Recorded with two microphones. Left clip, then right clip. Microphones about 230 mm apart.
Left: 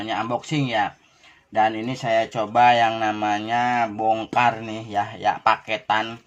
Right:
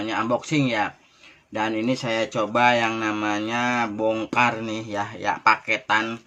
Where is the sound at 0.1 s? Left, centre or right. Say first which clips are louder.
Right 1 dB; centre.